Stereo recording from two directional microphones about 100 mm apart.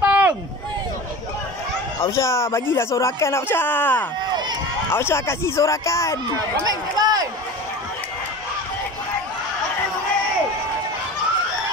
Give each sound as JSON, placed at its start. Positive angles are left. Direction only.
{"t": 0.0, "sound": "a sound", "side_deg": -15}
{"t": 2.0, "sound": "speech", "side_deg": 30}
{"t": 6.6, "sound": "speech", "side_deg": -40}